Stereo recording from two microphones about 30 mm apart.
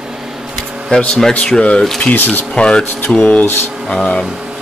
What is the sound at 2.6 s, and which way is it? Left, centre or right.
Speech, left.